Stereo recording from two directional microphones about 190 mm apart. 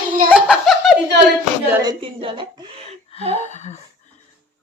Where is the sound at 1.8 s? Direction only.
25° right (ahead or behind).